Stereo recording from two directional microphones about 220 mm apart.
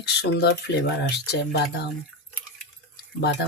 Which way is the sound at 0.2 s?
50° left (ahead or behind).